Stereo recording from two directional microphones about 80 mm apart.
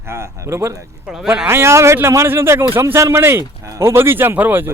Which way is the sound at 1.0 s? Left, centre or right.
Centre.